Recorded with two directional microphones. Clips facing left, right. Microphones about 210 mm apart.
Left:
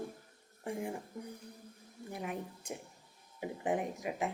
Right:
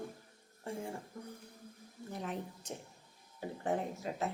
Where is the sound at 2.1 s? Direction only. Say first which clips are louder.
Left 1 dB; 10° left (ahead or behind).